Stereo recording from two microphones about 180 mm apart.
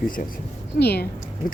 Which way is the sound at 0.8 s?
65° left (ahead or behind).